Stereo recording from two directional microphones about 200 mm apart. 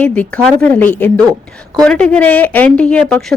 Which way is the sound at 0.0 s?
5° left (ahead or behind).